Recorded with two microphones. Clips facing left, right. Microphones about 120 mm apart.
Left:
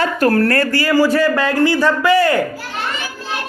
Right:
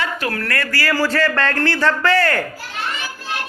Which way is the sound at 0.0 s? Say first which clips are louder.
Left 9 dB; 40° left (ahead or behind).